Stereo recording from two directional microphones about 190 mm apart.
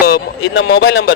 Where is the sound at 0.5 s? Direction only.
90° left.